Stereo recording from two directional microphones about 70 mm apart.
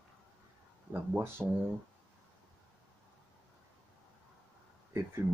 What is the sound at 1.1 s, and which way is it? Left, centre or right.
Speech, right.